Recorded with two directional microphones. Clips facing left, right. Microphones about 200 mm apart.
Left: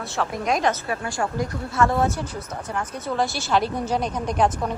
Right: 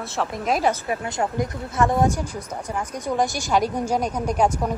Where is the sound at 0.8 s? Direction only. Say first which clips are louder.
Right 1 dB; 20° right (ahead or behind).